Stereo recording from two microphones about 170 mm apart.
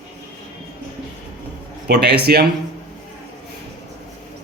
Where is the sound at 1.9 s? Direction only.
70° right (ahead or behind).